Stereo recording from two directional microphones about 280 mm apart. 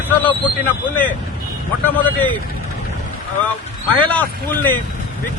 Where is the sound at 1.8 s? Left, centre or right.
Centre.